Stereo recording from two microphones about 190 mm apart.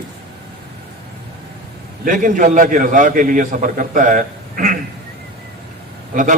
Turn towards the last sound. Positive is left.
turn(degrees=-45)  # may be behind; listen again after turning